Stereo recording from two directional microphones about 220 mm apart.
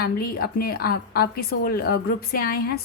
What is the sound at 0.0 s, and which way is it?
Speech, 45° left (ahead or behind).